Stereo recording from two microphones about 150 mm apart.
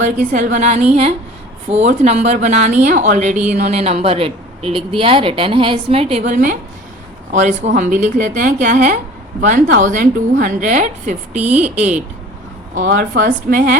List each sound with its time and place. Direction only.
0.0 s a woman's voice: 55° right (ahead or behind)
11.3 s speech: 10° right (ahead or behind)
12.7 s a woman's voice: 70° right (ahead or behind)